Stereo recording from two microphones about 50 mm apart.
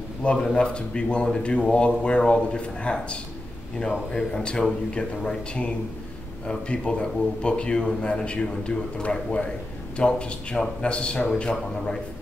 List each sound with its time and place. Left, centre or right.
0.2 s speech: left